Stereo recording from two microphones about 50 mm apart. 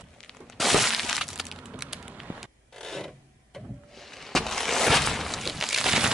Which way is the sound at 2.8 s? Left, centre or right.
Centre.